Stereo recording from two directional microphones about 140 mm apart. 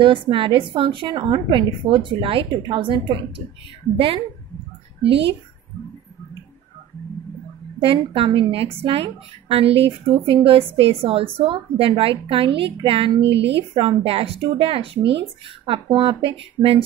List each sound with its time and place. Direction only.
0.0 s a woman's voice: 35° right (ahead or behind)
7.8 s a woman's voice: 40° right (ahead or behind)